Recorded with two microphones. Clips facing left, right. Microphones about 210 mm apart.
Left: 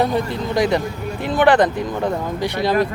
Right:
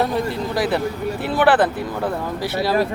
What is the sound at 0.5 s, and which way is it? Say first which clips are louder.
Speech: left 4 dB; 5° right (ahead or behind).